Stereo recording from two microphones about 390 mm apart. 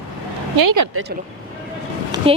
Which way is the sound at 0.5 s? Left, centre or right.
Right.